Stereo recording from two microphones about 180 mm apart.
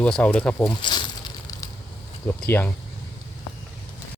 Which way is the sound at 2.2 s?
15° left (ahead or behind).